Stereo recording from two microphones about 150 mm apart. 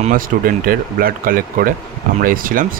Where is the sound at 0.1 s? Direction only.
70° right (ahead or behind).